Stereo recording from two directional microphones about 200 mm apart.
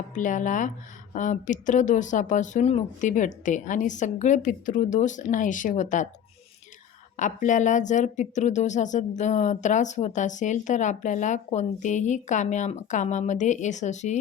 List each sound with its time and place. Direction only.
0.2 s speech: 40° left (ahead or behind)
7.2 s speech: 40° left (ahead or behind)